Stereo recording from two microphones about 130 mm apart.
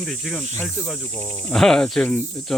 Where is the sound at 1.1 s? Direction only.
15° left (ahead or behind).